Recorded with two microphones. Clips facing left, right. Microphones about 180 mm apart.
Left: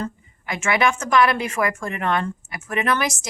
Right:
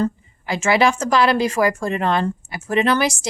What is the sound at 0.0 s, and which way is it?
A woman's voice, 30° right (ahead or behind).